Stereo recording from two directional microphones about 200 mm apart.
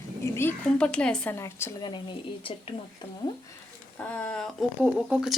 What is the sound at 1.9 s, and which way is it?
Speech, 25° left (ahead or behind).